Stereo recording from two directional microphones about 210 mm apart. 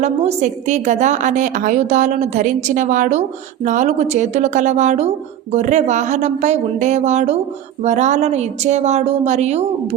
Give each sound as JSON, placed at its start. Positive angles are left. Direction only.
{"t": 0.0, "sound": "a woman's voice", "side_deg": -35}